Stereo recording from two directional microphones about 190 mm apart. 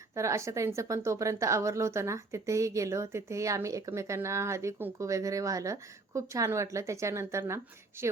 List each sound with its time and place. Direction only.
0.1 s speech: 15° right (ahead or behind)